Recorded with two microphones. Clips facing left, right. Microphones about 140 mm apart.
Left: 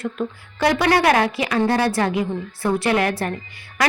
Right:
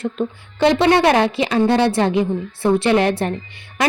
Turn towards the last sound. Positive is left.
turn(degrees=-20)  # may be behind; listen again after turning